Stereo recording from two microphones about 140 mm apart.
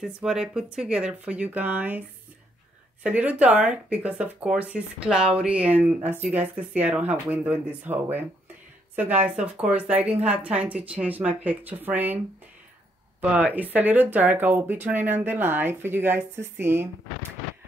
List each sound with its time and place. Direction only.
0.0 s speech: 5° right (ahead or behind)
13.2 s speech: 10° right (ahead or behind)